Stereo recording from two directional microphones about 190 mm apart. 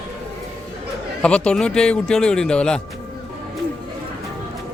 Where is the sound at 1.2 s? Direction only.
5° left (ahead or behind).